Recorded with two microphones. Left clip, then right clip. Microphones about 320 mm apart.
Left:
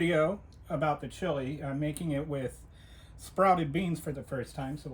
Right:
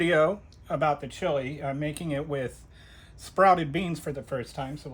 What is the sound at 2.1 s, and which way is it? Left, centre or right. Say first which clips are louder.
Speech: right 4 dB; right.